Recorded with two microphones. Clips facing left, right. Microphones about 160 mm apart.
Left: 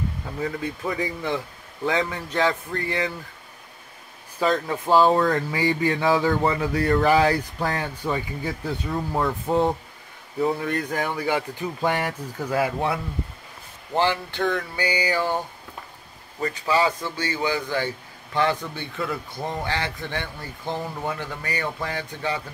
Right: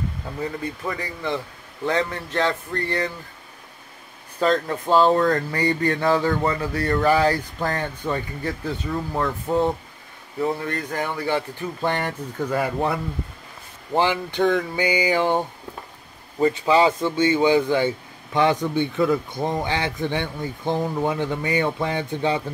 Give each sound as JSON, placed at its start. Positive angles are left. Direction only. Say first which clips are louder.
{"t": 0.8, "sound": "speech", "louder": "left 2 dB", "side_deg": 5}
{"t": 4.4, "sound": "speech", "louder": "right 2 dB", "side_deg": 10}
{"t": 13.9, "sound": "speech", "louder": "right 2 dB", "side_deg": -15}